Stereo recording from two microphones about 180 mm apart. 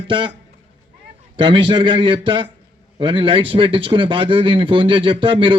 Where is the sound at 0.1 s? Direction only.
25° right (ahead or behind).